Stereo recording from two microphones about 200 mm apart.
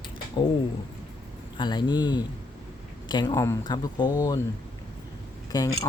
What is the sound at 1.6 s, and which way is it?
Speech, 20° left (ahead or behind).